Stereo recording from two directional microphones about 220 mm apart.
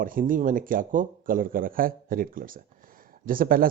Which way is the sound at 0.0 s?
40° right (ahead or behind).